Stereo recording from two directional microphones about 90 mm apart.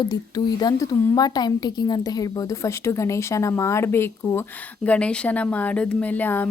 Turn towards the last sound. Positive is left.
turn(degrees=20)  # may be behind; listen again after turning